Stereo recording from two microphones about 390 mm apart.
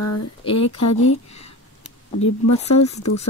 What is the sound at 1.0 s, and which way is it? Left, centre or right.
Speech, centre.